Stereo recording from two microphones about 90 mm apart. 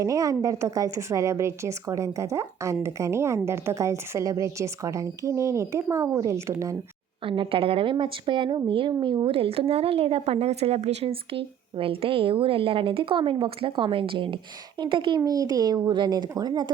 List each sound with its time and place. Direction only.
0.0 s a woman's voice: 40° right (ahead or behind)
7.3 s speech: 80° right
15.2 s speech: 45° right (ahead or behind)